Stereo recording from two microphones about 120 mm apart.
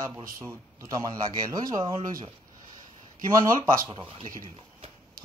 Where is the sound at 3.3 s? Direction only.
30° right (ahead or behind).